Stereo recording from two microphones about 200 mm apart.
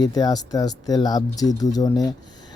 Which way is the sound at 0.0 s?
20° left (ahead or behind).